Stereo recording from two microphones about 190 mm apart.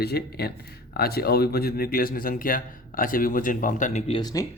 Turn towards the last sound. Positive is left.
turn(degrees=20)  # may be behind; listen again after turning